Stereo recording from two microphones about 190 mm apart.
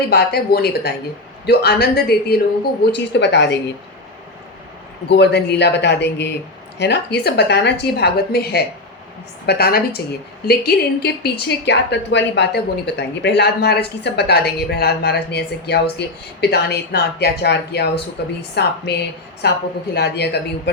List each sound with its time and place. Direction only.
0.1 s a woman's voice: 55° left (ahead or behind)
5.0 s a woman's voice: 60° left (ahead or behind)